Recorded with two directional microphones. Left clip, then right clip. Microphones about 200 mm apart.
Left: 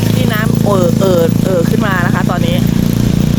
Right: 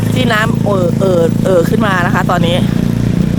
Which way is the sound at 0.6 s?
Centre (ahead or behind).